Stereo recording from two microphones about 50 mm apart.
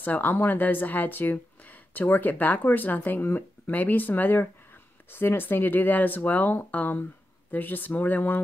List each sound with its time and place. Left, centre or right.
0.0 s speech: left